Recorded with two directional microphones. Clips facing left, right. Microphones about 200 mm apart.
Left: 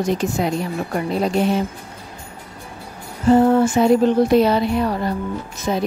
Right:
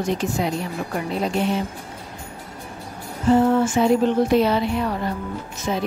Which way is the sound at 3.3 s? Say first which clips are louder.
Left 3 dB; 40° left (ahead or behind).